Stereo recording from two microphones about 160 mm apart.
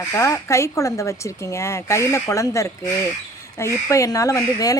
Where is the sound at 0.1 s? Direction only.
20° left (ahead or behind).